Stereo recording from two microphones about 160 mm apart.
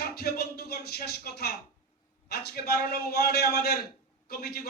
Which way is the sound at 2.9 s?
85° left.